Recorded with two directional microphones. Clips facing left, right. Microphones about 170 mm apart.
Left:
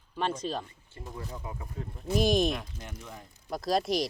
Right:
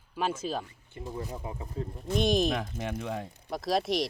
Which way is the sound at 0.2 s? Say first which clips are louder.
Even; 5° right (ahead or behind).